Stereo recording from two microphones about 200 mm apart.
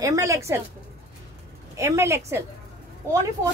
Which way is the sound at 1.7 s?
15° right (ahead or behind).